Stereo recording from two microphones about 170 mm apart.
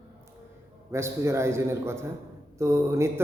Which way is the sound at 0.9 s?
15° right (ahead or behind).